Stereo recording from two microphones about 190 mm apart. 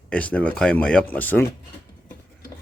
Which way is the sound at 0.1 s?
5° left (ahead or behind).